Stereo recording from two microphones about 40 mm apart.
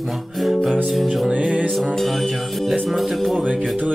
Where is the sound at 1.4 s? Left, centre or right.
Right.